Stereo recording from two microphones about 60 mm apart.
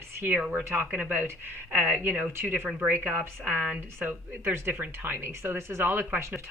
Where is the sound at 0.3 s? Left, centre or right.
Right.